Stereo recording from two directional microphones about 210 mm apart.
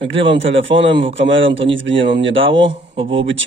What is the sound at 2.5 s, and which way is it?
Speech, 25° right (ahead or behind).